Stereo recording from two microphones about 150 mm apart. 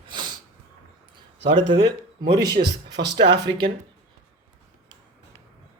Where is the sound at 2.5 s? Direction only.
90° right.